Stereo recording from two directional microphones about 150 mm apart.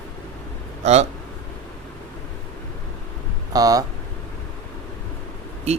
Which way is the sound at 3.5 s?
25° right (ahead or behind).